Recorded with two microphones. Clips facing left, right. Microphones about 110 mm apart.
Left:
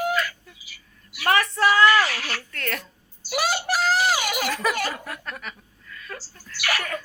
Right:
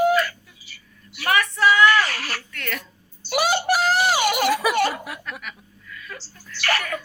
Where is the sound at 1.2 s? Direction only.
35° left (ahead or behind).